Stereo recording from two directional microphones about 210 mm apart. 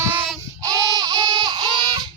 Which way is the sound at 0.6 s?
20° right (ahead or behind).